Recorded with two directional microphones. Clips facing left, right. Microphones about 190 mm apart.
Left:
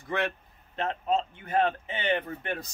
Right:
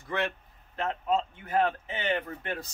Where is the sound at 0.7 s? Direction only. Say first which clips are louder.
Left 1 dB; 20° left (ahead or behind).